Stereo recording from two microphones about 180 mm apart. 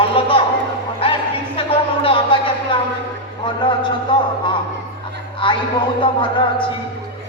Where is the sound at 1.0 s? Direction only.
30° left (ahead or behind).